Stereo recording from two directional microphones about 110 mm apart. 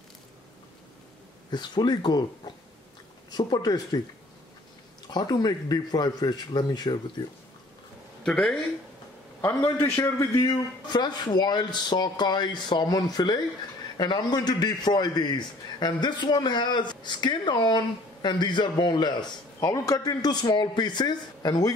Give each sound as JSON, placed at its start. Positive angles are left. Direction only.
{"t": 1.5, "sound": "a man's voice", "side_deg": 40}
{"t": 5.0, "sound": "a man's voice", "side_deg": 40}
{"t": 8.2, "sound": "speech", "side_deg": 5}
{"t": 9.8, "sound": "a man's voice", "side_deg": 25}
{"t": 19.7, "sound": "a man's voice", "side_deg": 30}